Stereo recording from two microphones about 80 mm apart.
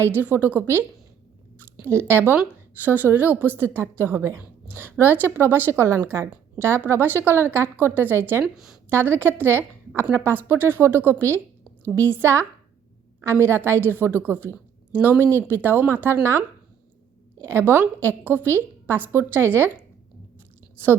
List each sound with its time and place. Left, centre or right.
0.0 s a woman's voice: right
2.0 s a woman's voice: right
8.5 s a woman's voice: centre
8.9 s a woman's voice: right
17.4 s a woman's voice: right